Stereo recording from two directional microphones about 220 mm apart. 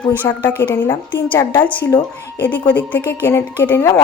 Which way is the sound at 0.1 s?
10° left (ahead or behind).